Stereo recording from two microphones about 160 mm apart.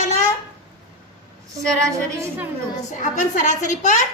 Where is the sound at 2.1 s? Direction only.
15° right (ahead or behind).